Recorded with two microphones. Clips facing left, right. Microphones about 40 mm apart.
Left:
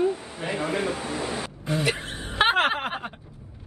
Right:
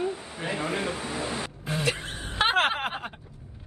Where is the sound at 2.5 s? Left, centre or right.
Centre.